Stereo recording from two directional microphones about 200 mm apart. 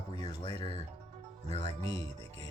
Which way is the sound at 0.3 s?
20° left (ahead or behind).